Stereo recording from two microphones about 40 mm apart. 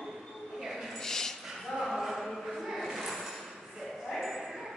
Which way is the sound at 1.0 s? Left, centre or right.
Centre.